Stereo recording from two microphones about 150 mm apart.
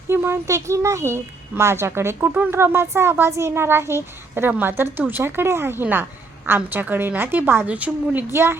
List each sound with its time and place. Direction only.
0.1 s a woman's voice: 15° right (ahead or behind)